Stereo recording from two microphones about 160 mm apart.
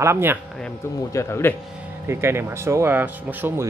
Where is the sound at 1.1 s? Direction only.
15° left (ahead or behind).